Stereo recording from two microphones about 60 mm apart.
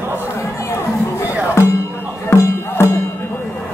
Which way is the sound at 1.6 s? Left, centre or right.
Left.